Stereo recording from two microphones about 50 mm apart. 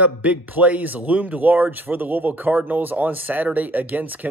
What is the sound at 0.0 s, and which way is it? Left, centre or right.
Speech, right.